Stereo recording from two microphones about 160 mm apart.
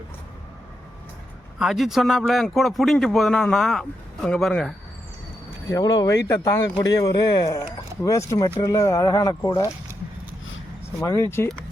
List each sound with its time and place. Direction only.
1.5 s speech: centre (ahead or behind)
5.7 s speech: 20° left (ahead or behind)
11.0 s speech: 20° left (ahead or behind)